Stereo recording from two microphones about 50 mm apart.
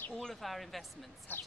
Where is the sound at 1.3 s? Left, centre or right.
Left.